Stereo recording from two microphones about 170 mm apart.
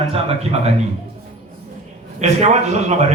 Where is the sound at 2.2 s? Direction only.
40° right (ahead or behind).